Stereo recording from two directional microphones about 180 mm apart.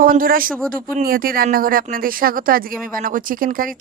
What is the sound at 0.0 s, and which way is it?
A man's voice, 50° right (ahead or behind).